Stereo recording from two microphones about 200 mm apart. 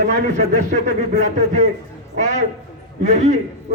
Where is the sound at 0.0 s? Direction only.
35° right (ahead or behind).